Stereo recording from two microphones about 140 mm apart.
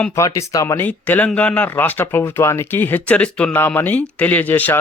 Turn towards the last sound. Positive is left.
turn(degrees=10)  # may be behind; listen again after turning